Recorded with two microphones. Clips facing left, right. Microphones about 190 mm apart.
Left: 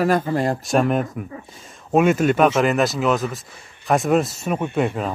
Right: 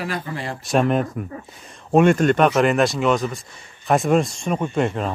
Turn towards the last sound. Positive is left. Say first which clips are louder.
# even
turn(degrees=5)  # may be behind; listen again after turning